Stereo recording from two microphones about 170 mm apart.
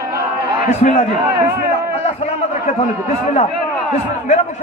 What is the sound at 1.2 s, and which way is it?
Speech, 15° right (ahead or behind).